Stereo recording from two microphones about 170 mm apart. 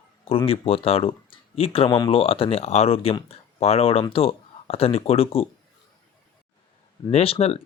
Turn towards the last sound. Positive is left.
turn(degrees=35)  # may be behind; listen again after turning